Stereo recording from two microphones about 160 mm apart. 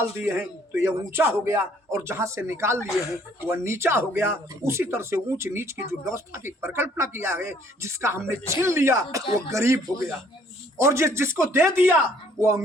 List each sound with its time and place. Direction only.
0.0 s speech: 15° right (ahead or behind)